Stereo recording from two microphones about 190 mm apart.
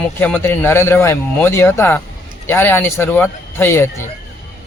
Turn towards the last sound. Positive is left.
turn(degrees=10)  # may be behind; listen again after turning